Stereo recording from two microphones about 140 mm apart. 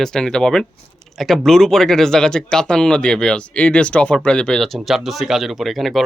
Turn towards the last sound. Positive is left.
turn(degrees=0)  # may be behind; listen again after turning